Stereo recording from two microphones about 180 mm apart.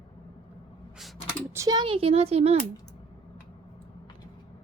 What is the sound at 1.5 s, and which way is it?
A woman's voice, 20° right (ahead or behind).